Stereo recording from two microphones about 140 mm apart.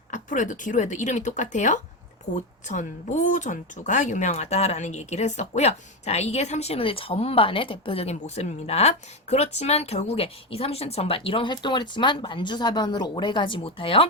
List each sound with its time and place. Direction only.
0.1 s speech: 65° left (ahead or behind); by 14.1 s 40° left (ahead or behind)